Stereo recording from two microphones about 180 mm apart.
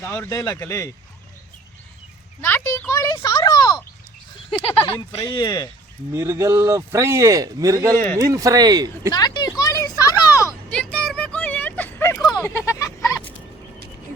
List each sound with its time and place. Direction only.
0.0 s speech: 15° left (ahead or behind)
2.4 s a child's voice: 10° left (ahead or behind)
2.9 s a sound: 20° left (ahead or behind)
4.5 s speech: 30° left (ahead or behind)
6.1 s a man's voice: 15° right (ahead or behind)
7.9 s speech: 10° left (ahead or behind)
8.2 s speech: 20° right (ahead or behind)
9.1 s a sound: 25° left (ahead or behind)
10.4 s a sound: 5° left (ahead or behind)